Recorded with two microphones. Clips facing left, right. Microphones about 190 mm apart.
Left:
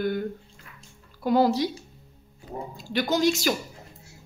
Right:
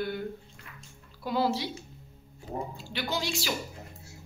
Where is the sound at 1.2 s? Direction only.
45° left (ahead or behind).